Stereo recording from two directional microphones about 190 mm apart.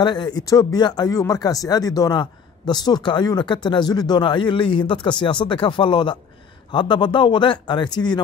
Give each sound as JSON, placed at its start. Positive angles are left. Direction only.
{"t": 0.0, "sound": "speech", "side_deg": 25}